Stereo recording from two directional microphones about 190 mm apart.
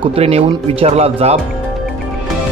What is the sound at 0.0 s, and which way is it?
Speech, 30° right (ahead or behind).